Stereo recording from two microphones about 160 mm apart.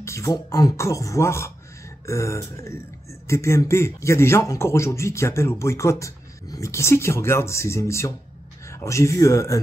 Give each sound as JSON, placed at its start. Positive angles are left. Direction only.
{"t": 0.0, "sound": "speech", "side_deg": 20}